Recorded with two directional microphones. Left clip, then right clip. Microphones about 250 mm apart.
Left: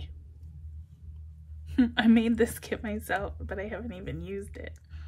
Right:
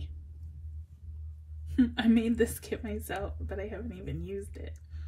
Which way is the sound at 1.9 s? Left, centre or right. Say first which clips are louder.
Left 5 dB; centre.